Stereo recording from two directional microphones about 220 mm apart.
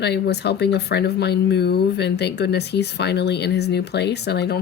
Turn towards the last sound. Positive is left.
turn(degrees=50)  # may be behind; listen again after turning